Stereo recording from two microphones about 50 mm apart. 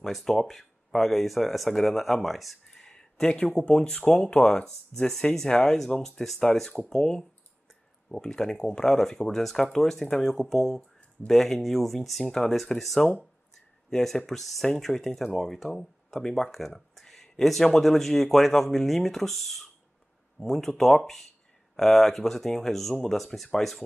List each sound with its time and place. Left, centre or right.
0.0 s speech: centre
2.8 s speech: centre